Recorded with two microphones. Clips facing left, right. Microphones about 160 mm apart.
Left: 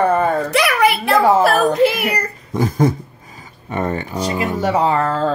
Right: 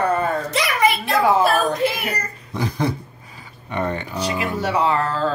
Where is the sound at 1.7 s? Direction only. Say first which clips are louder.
Left 6 dB; 70° left (ahead or behind).